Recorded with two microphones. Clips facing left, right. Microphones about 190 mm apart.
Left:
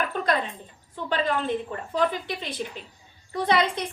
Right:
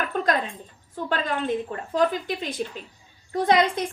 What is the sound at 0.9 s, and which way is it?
A woman's voice, 45° right (ahead or behind).